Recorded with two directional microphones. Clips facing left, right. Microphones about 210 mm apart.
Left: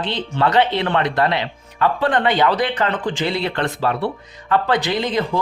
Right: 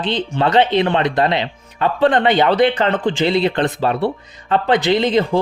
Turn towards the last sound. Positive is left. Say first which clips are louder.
# right 5 dB
turn(degrees=-25)  # may be behind; listen again after turning